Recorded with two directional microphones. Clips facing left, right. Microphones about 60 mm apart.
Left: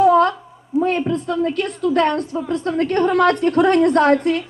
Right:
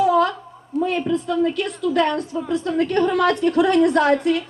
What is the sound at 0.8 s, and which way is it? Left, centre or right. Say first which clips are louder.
A man's voice: left 2 dB; left.